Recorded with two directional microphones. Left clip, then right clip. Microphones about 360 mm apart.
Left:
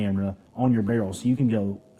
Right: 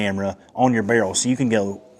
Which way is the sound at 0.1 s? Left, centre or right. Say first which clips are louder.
Right 7 dB; centre.